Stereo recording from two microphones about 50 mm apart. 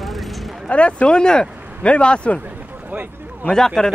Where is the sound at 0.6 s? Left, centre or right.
Left.